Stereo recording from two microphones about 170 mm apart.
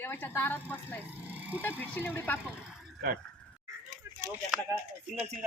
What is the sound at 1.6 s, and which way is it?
Speech, 10° left (ahead or behind).